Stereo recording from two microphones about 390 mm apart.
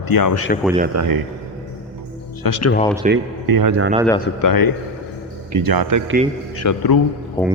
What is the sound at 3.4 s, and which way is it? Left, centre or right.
Speech, right.